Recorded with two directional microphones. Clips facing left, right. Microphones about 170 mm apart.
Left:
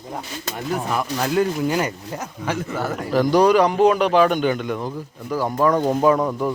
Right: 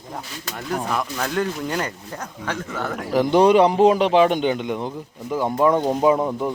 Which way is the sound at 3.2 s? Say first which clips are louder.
Right 1 dB; 25° right (ahead or behind).